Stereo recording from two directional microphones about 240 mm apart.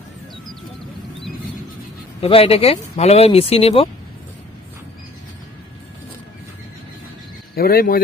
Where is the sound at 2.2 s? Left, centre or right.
Left.